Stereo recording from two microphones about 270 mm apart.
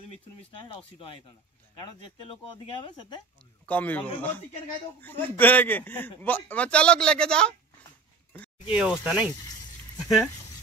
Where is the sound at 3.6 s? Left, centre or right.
Centre.